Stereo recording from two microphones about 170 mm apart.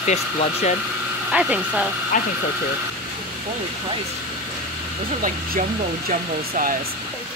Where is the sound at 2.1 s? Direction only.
50° left (ahead or behind).